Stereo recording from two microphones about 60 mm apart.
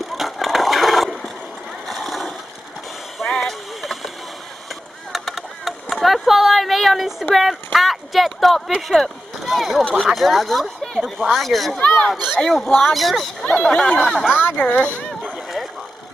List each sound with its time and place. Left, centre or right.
0.1 s a sound: centre
1.9 s splash: centre
3.3 s boat: centre
5.1 s a sound: centre
7.3 s speech: centre
14.3 s speech: left